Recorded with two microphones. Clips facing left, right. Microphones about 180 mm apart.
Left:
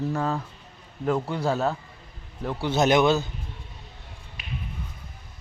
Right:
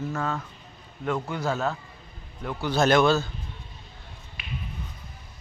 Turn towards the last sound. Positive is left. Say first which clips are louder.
# left 1 dB
turn(degrees=40)  # may be behind; listen again after turning